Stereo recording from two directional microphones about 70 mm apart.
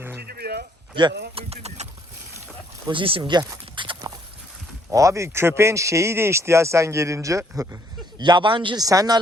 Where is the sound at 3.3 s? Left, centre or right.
Right.